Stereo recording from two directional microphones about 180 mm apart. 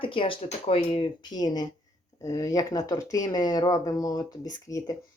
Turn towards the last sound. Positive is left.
turn(degrees=20)  # may be behind; listen again after turning